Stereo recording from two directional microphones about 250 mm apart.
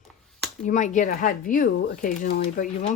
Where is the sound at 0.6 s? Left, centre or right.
Left.